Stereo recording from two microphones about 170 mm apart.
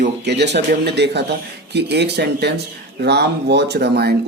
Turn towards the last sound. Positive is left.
turn(degrees=-75)  # may be behind; listen again after turning